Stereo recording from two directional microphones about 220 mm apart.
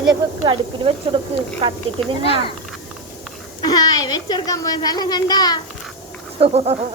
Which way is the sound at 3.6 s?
15° left (ahead or behind).